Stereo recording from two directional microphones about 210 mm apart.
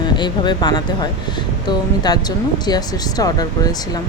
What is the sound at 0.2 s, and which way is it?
Speech, 20° left (ahead or behind).